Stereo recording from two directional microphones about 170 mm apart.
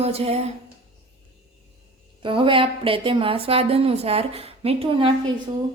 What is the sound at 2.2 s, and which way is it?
A woman's voice, 30° right (ahead or behind).